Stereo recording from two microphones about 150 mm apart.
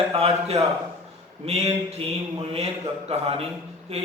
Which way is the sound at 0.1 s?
40° right (ahead or behind).